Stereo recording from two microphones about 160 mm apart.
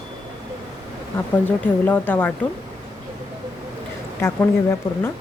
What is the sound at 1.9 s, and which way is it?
Speech, 10° left (ahead or behind).